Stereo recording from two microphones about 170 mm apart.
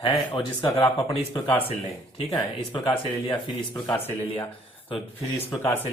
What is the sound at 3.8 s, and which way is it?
Speech, 10° left (ahead or behind).